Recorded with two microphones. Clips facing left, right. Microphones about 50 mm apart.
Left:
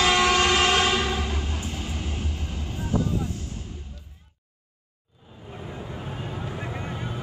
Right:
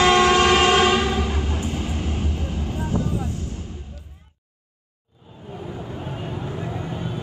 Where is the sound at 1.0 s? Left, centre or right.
Centre.